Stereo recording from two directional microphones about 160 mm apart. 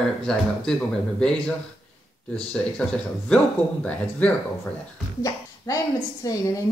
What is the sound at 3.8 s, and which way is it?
Speech, 10° left (ahead or behind).